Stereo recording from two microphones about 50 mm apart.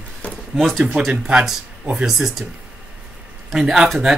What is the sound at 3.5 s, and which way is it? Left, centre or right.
Speech, centre.